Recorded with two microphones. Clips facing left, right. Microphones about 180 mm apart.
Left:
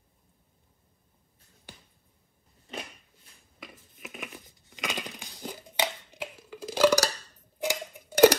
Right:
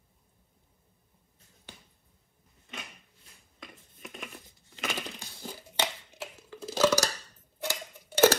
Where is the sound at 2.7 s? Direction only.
35° left (ahead or behind).